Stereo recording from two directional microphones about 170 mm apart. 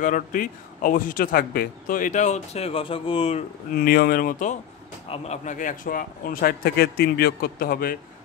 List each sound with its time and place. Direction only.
0.0 s a man's voice: 50° left (ahead or behind); by 3.4 s 35° left (ahead or behind)
3.7 s a man's voice: 60° left (ahead or behind)
5.1 s a man's voice: 40° left (ahead or behind); by 8.0 s 60° left (ahead or behind)